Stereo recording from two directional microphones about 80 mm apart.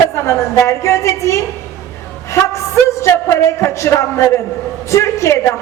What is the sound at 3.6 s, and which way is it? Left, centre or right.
A woman's voice, left.